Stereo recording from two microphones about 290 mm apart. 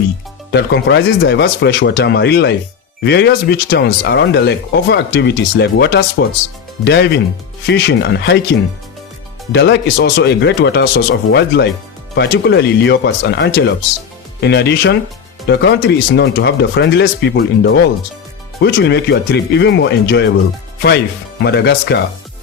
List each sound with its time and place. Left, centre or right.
0.5 s speech: left
9.5 s speech: left
21.4 s speech: left